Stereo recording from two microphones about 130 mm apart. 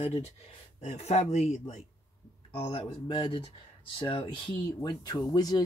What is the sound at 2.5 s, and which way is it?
Speech, 45° left (ahead or behind).